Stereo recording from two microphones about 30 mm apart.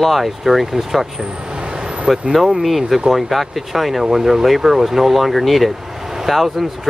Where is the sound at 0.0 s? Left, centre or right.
Centre.